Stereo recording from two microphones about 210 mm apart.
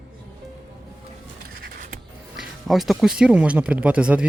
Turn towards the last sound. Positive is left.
turn(degrees=-5)  # may be behind; listen again after turning